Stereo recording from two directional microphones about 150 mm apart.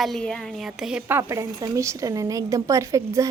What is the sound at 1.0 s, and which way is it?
A woman's voice, 20° right (ahead or behind).